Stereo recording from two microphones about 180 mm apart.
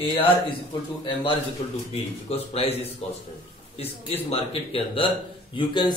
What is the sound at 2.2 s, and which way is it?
A man's voice, 35° left (ahead or behind).